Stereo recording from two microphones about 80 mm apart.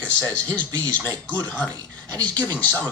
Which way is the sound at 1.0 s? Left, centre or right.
Right.